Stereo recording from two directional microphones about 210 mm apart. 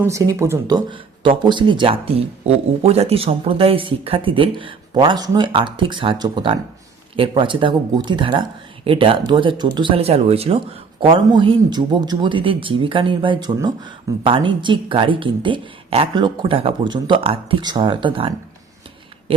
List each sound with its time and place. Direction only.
0.0 s speech: 15° right (ahead or behind)